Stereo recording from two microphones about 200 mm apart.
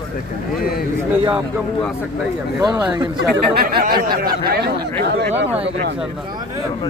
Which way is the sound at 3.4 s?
50° right (ahead or behind).